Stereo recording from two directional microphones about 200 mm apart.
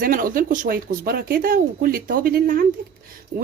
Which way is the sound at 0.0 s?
45° right (ahead or behind).